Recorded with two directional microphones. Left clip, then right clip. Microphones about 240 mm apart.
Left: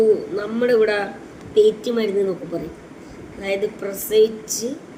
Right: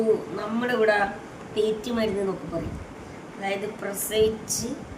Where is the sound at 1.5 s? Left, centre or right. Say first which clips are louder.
Left 9 dB; right.